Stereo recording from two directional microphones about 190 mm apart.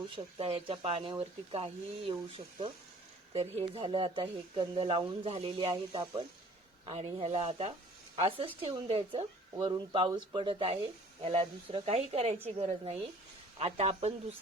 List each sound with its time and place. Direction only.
0.3 s speech: 30° right (ahead or behind)